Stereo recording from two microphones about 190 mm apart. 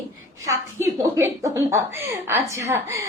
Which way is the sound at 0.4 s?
15° right (ahead or behind).